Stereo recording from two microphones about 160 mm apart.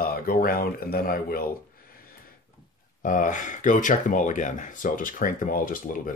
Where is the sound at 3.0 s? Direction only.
55° left (ahead or behind).